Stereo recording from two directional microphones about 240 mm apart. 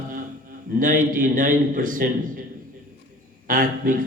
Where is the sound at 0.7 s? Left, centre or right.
Right.